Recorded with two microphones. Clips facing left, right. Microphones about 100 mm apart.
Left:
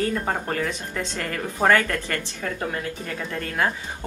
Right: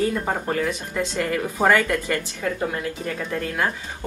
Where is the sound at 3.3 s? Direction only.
5° right (ahead or behind).